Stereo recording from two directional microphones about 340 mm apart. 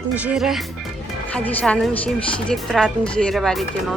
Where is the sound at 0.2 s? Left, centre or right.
Centre.